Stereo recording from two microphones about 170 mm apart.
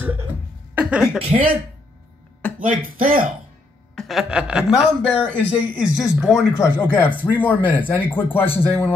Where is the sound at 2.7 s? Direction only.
55° right (ahead or behind).